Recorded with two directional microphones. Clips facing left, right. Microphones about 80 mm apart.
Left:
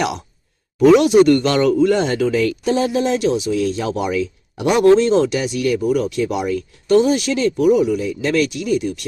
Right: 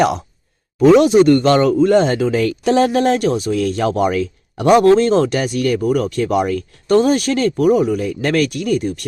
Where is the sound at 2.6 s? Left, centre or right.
Right.